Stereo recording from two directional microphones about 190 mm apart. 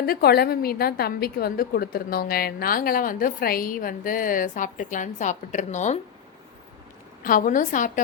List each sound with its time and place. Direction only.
0.0 s a woman's voice: 55° left (ahead or behind)
7.2 s a woman's voice: 45° left (ahead or behind)